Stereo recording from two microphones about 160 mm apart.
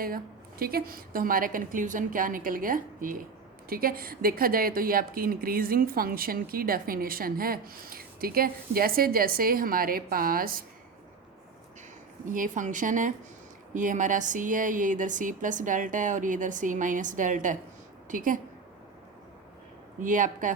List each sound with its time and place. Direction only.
0.6 s speech: 70° right (ahead or behind)
12.2 s speech: 55° right (ahead or behind)
20.0 s speech: 55° right (ahead or behind)